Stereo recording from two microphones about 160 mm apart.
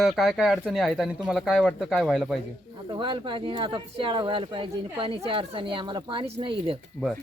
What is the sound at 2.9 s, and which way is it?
Speech, 30° right (ahead or behind).